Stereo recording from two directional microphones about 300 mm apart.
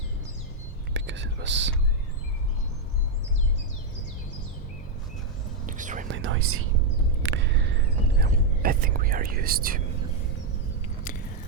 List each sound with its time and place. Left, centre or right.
0.9 s whispering: right
5.6 s whispering: right
6.1 s whispering: right
7.2 s a sound: right
8.2 s whispering: right
11.1 s biting: left